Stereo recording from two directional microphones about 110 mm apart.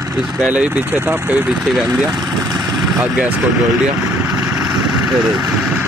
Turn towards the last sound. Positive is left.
turn(degrees=-5)  # may be behind; listen again after turning